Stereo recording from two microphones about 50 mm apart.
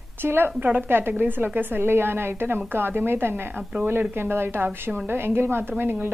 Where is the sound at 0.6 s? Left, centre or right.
Right.